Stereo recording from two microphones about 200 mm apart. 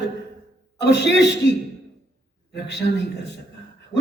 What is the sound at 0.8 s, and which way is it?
Speech, 60° left (ahead or behind).